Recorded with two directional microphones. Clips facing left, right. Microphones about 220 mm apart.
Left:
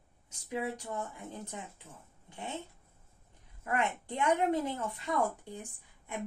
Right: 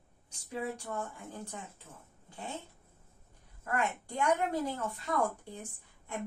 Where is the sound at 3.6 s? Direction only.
20° left (ahead or behind).